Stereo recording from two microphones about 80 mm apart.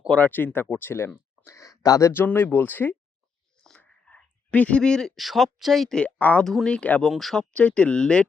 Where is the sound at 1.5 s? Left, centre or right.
Left.